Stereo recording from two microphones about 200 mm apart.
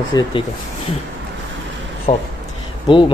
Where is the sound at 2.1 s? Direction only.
30° left (ahead or behind).